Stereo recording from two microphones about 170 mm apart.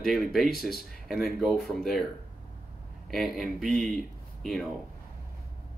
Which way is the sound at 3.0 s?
Centre (ahead or behind).